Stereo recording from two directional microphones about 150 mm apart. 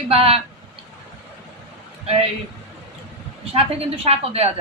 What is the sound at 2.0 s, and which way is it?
Speech, 40° right (ahead or behind).